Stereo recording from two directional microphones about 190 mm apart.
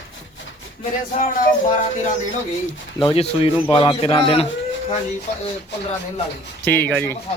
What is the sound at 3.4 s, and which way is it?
A man's voice, 25° left (ahead or behind).